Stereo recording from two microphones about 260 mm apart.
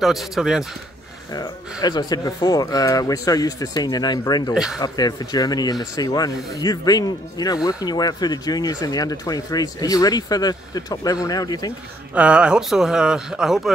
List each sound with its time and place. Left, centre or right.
0.0 s a man's voice: centre
1.3 s speech: centre
12.1 s a man's voice: centre